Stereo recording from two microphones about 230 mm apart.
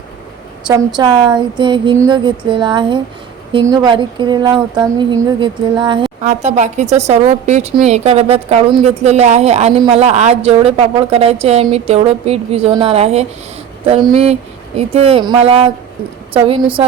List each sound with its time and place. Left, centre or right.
0.7 s a woman's voice: centre